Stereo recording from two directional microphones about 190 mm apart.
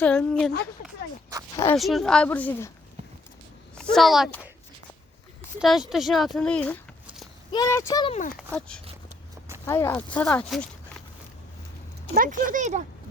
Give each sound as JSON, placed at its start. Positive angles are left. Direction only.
{"t": 0.0, "sound": "speech", "side_deg": 5}
{"t": 1.5, "sound": "a woman's voice", "side_deg": 15}
{"t": 1.8, "sound": "a woman's voice", "side_deg": 0}
{"t": 3.8, "sound": "speech", "side_deg": 0}
{"t": 5.5, "sound": "speech", "side_deg": 0}
{"t": 7.5, "sound": "a woman's voice", "side_deg": 15}
{"t": 8.3, "sound": "speech", "side_deg": 5}
{"t": 12.1, "sound": "speech", "side_deg": -45}